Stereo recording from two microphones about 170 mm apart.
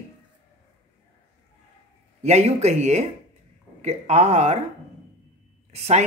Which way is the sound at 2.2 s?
40° right (ahead or behind).